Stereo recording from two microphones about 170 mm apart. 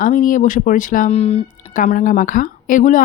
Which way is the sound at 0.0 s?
50° left (ahead or behind).